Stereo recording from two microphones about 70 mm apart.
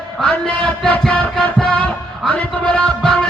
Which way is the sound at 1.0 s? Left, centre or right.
Centre.